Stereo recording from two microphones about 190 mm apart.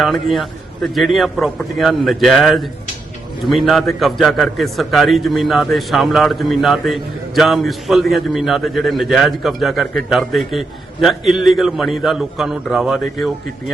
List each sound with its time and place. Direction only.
0.0 s a man's voice: centre (ahead or behind)